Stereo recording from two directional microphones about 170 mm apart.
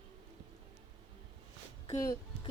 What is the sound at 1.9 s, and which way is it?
Speech, 20° left (ahead or behind).